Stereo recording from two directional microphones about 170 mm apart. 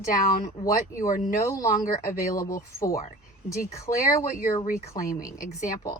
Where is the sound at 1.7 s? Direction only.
50° left (ahead or behind).